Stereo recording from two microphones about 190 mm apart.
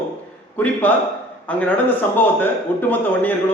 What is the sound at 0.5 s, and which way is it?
A man's voice, 10° left (ahead or behind).